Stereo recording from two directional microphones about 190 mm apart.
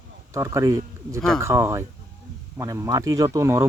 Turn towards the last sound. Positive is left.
turn(degrees=-15)  # may be behind; listen again after turning